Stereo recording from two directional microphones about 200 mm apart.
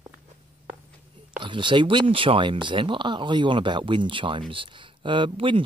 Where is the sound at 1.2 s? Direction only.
25° right (ahead or behind).